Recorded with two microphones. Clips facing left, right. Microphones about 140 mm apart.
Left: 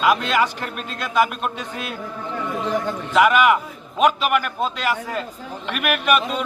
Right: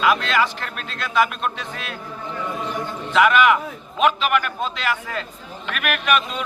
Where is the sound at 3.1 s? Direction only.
5° left (ahead or behind).